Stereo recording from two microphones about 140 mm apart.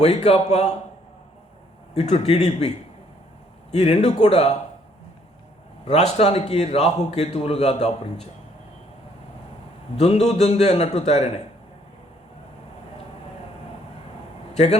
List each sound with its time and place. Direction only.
0.0 s a man's voice: 50° left (ahead or behind)
2.0 s a man's voice: 50° left (ahead or behind)
6.1 s a man's voice: 45° left (ahead or behind)
10.0 s a man's voice: 50° left (ahead or behind)
14.5 s a man's voice: 50° left (ahead or behind)